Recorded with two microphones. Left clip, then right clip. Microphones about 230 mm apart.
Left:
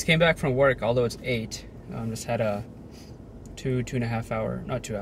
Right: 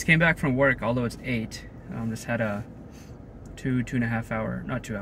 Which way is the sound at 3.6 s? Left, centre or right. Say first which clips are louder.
Right 1 dB; centre.